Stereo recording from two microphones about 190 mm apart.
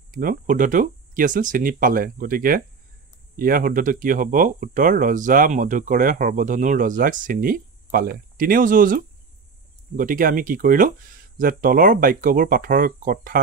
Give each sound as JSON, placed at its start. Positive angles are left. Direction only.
{"t": 0.1, "sound": "speech", "side_deg": -45}